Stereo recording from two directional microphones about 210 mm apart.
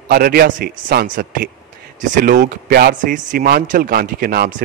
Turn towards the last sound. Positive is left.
turn(degrees=-45)  # may be behind; listen again after turning